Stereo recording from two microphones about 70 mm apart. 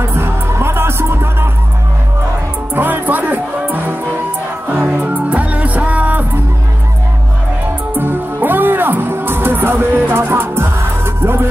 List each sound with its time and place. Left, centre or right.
0.0 s music: right
2.7 s music: right
7.9 s music: right